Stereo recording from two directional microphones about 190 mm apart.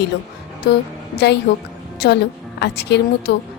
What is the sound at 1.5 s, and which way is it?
A woman's voice, 55° left (ahead or behind).